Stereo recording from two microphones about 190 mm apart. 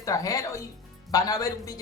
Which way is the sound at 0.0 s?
15° left (ahead or behind).